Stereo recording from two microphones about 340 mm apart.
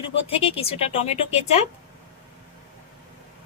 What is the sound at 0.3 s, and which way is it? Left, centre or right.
A woman's voice, centre.